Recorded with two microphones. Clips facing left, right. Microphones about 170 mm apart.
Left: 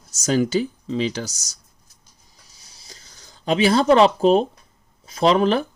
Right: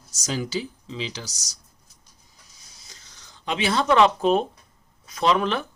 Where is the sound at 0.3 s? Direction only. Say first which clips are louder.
Left 9 dB; 50° left (ahead or behind).